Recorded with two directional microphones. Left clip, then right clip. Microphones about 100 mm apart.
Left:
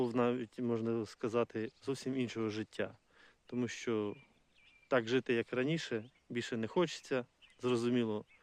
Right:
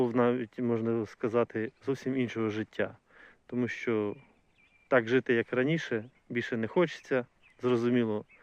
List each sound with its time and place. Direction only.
0.0 s speech: 25° left (ahead or behind)